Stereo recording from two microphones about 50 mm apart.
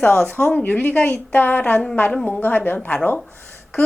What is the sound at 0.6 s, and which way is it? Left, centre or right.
A woman's voice, left.